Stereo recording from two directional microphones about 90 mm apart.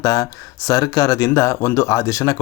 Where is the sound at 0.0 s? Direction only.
40° left (ahead or behind).